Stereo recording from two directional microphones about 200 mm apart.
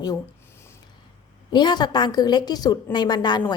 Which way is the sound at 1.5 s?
20° left (ahead or behind).